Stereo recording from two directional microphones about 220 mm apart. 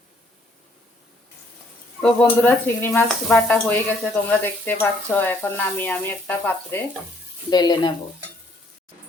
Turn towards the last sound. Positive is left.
turn(degrees=20)  # may be behind; listen again after turning